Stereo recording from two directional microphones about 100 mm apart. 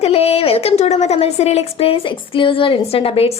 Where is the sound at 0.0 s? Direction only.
90° left.